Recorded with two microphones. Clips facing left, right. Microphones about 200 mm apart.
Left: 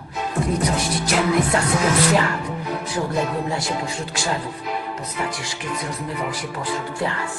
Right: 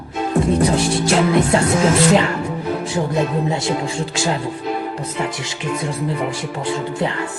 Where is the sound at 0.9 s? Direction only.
25° right (ahead or behind).